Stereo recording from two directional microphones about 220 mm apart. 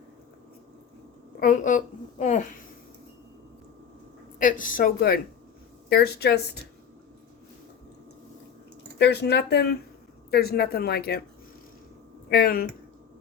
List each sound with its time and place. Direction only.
1.4 s a woman's voice: 35° left (ahead or behind)
4.4 s a woman's voice: 35° left (ahead or behind)
9.0 s speech: 50° left (ahead or behind)
12.3 s speech: 45° left (ahead or behind)